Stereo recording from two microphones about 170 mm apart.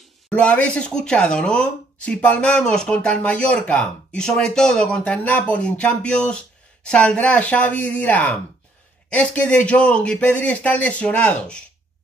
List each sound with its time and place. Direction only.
0.3 s speech: 5° left (ahead or behind)